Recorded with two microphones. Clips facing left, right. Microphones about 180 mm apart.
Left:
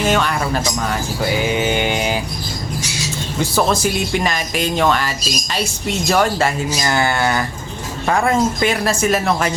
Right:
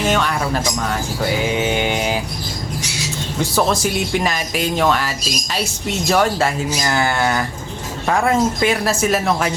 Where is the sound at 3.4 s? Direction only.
Centre (ahead or behind).